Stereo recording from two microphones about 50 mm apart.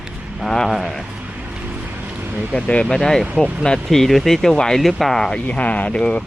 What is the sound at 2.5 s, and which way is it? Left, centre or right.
Speech, left.